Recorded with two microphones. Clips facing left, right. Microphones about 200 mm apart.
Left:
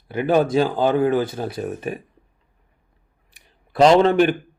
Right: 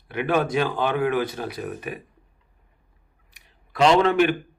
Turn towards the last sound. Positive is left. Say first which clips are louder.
# left 4 dB
turn(degrees=35)  # may be behind; listen again after turning